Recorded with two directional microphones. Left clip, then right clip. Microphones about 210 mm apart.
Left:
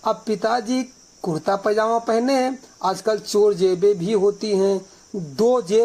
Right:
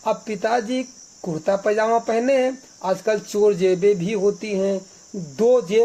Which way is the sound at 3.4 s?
20° left (ahead or behind).